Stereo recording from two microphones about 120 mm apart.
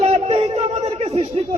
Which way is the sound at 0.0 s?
60° right (ahead or behind).